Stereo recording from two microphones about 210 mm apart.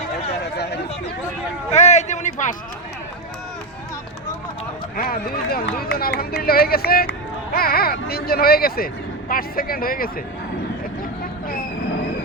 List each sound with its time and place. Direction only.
0.5 s chatter: 55° left (ahead or behind)
1.7 s a sound: 35° left (ahead or behind)
4.9 s speech: 45° left (ahead or behind)